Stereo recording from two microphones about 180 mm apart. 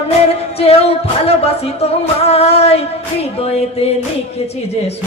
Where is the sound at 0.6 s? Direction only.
35° left (ahead or behind).